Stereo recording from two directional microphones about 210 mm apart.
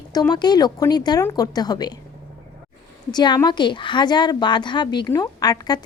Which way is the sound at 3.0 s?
20° left (ahead or behind).